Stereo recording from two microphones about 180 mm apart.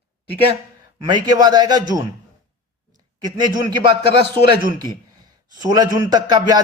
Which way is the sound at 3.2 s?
25° right (ahead or behind).